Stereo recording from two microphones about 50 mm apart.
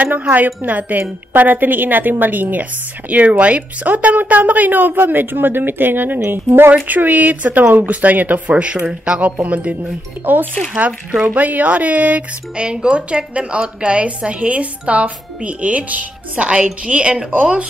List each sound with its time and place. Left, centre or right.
0.0 s speech: right
6.7 s a woman's voice: right